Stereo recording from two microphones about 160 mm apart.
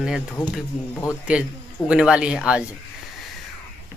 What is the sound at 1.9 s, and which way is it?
Speech, 5° right (ahead or behind).